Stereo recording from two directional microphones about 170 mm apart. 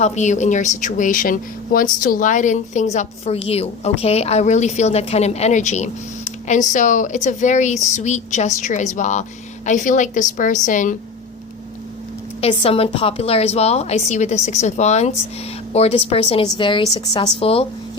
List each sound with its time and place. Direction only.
0.0 s speech: 45° left (ahead or behind)
12.4 s a woman's voice: 35° left (ahead or behind)